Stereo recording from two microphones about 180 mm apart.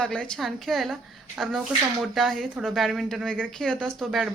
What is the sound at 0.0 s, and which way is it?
Speech, 5° left (ahead or behind).